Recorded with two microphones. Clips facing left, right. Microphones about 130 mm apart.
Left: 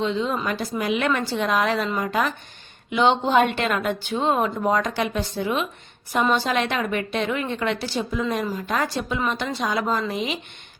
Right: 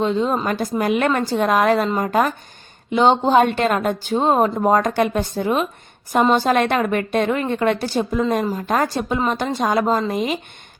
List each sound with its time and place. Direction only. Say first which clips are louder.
0.0 s a woman's voice: right 5 dB; 45° right (ahead or behind)